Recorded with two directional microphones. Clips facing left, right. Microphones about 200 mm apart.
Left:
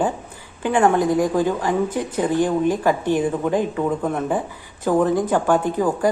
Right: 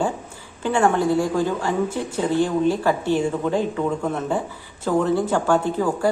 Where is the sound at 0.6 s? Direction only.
15° left (ahead or behind).